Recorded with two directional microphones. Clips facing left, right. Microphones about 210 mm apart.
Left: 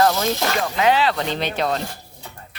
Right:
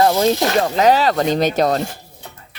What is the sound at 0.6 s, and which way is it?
Speech, 40° right (ahead or behind).